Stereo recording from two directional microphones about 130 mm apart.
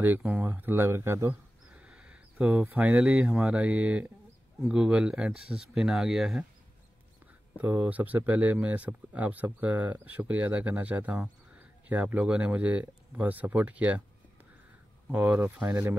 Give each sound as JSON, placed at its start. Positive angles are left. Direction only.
{"t": 0.0, "sound": "speech", "side_deg": -10}
{"t": 1.7, "sound": "mouse", "side_deg": -10}
{"t": 2.6, "sound": "speech", "side_deg": -10}
{"t": 7.5, "sound": "speech", "side_deg": -15}
{"t": 15.0, "sound": "speech", "side_deg": -15}